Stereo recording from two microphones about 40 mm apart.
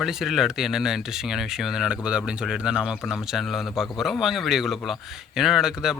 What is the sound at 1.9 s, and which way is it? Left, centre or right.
A man's voice, right.